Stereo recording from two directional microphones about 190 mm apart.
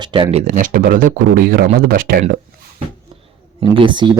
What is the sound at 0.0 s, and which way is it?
Speech, 25° right (ahead or behind).